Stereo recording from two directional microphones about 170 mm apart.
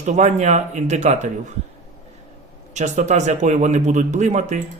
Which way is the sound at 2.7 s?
45° right (ahead or behind).